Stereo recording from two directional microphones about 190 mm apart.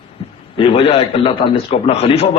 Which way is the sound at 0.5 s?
30° left (ahead or behind).